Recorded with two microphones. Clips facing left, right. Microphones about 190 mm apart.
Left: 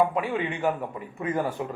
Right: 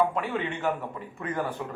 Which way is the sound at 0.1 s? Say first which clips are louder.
Left 2 dB; 10° left (ahead or behind).